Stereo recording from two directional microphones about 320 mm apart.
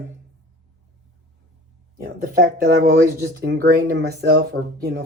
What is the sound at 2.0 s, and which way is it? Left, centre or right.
Speech, right.